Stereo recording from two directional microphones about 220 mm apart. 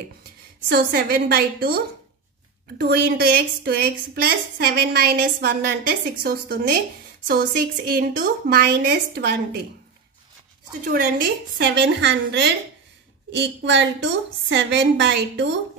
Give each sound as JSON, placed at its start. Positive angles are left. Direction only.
{"t": 0.7, "sound": "a woman's voice", "side_deg": -45}
{"t": 2.8, "sound": "a woman's voice", "side_deg": -45}
{"t": 10.9, "sound": "a woman's voice", "side_deg": -50}